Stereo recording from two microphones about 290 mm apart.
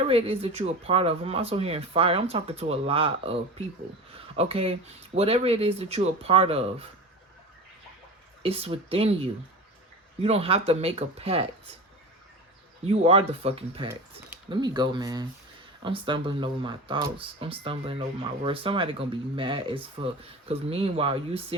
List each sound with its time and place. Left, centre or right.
0.1 s speech: centre
4.4 s speech: centre
8.4 s speech: right
10.2 s speech: right
12.9 s speech: right